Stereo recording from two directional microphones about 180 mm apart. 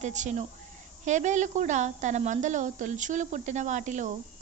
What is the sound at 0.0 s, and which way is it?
A woman's voice, 40° right (ahead or behind).